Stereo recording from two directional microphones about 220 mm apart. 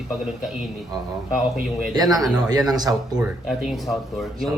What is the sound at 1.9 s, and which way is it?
Speech, 15° right (ahead or behind).